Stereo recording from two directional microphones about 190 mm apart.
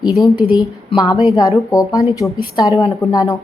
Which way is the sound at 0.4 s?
Centre (ahead or behind).